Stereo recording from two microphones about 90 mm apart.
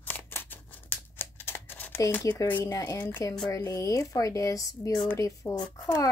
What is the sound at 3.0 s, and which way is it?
Speech, 20° left (ahead or behind).